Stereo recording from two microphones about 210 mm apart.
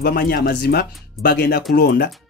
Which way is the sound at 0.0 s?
45° left (ahead or behind).